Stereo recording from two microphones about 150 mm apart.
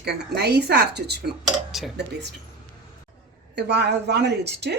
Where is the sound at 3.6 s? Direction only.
90° right.